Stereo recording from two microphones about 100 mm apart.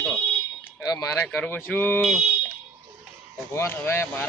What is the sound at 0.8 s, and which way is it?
Speech, 35° left (ahead or behind).